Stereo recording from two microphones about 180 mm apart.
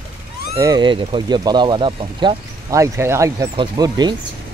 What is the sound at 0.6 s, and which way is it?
Speech, 20° right (ahead or behind).